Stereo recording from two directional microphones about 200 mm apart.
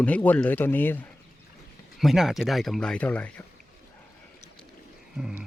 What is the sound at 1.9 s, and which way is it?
Speech, centre (ahead or behind).